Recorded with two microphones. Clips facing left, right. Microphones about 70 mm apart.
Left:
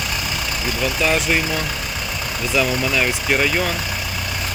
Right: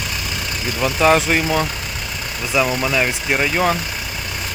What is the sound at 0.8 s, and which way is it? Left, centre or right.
Speech, right.